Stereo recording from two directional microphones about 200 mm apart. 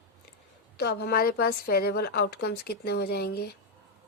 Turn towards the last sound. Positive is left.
turn(degrees=55)  # may be behind; listen again after turning